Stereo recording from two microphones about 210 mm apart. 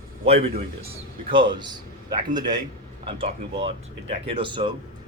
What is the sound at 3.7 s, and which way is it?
Speech, 25° right (ahead or behind).